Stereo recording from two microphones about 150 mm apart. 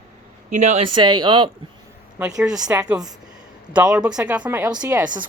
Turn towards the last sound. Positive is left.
turn(degrees=-15)  # may be behind; listen again after turning